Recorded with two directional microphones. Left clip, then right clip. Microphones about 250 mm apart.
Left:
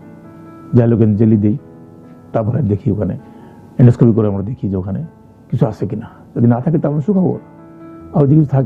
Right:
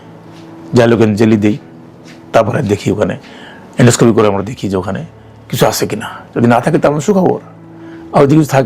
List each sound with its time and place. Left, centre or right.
0.7 s a man's voice: centre
7.1 s speech: right
8.3 s a man's voice: centre